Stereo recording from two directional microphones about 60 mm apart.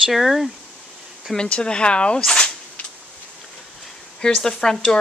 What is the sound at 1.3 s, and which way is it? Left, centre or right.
Speech, centre.